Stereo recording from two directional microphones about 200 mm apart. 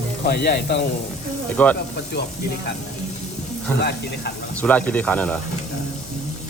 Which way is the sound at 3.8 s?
55° left (ahead or behind).